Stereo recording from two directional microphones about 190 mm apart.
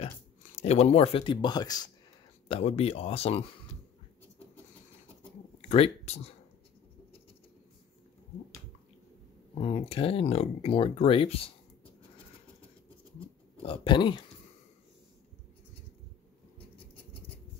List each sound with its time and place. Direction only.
0.6 s speech: 35° left (ahead or behind)
2.4 s speech: 30° left (ahead or behind)
5.7 s speech: 35° left (ahead or behind)
9.6 s speech: 30° left (ahead or behind)
13.6 s speech: 25° left (ahead or behind)
16.5 s rodents: 30° left (ahead or behind)